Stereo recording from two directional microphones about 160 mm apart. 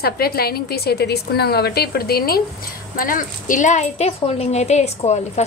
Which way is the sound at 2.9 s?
60° left (ahead or behind).